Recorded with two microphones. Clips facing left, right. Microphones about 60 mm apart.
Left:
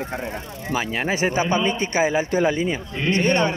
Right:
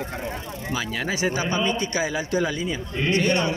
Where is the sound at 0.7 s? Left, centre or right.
Left.